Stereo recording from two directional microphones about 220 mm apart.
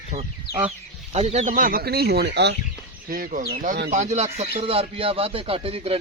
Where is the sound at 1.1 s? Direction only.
30° right (ahead or behind).